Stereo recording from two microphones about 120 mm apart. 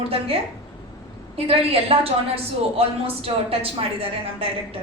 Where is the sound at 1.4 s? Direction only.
55° right (ahead or behind).